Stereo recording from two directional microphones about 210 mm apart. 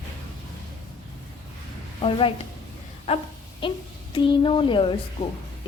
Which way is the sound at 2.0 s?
25° left (ahead or behind).